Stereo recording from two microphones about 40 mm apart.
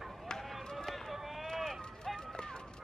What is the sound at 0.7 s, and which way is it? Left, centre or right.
Run, centre.